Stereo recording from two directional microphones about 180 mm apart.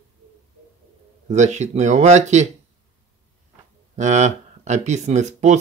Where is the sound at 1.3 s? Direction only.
40° right (ahead or behind).